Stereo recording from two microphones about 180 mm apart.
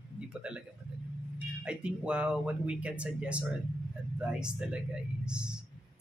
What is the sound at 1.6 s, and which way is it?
Speech, 5° right (ahead or behind).